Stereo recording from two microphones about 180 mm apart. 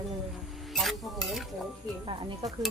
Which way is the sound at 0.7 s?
Centre (ahead or behind).